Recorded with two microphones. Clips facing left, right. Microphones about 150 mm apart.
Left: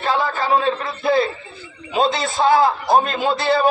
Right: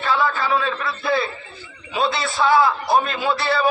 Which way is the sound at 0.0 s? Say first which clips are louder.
Left 1 dB; 45° left (ahead or behind).